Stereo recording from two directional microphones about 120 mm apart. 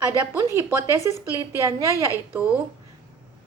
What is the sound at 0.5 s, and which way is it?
A woman's voice, 20° right (ahead or behind).